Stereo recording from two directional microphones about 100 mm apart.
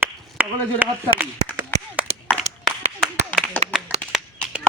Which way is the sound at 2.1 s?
90° right.